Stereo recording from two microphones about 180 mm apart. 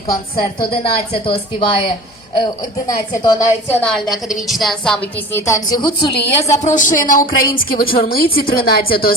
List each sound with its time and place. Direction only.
0.7 s a woman's voice: 30° left (ahead or behind)
6.5 s speech: 40° left (ahead or behind)